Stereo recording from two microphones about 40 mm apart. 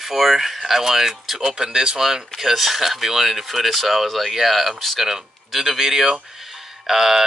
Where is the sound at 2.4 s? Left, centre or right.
Centre.